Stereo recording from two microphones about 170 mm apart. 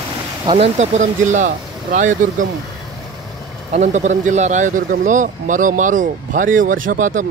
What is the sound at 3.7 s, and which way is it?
Speech, 45° right (ahead or behind).